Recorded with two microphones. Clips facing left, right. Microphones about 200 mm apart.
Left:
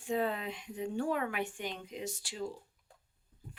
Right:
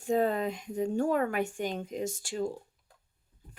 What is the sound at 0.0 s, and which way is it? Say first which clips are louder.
Speech: right 6 dB; 45° right (ahead or behind).